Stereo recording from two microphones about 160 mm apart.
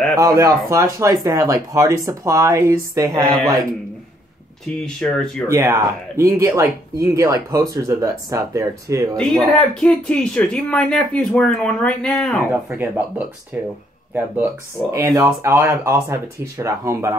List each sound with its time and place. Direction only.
0.1 s speech: 20° right (ahead or behind)
4.6 s speech: 5° left (ahead or behind)
5.5 s speech: 20° right (ahead or behind)
9.1 s speech: 5° left (ahead or behind)
12.7 s speech: 15° right (ahead or behind)